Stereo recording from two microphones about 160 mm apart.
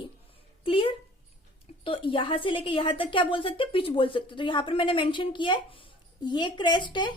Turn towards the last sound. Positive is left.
turn(degrees=30)  # may be behind; listen again after turning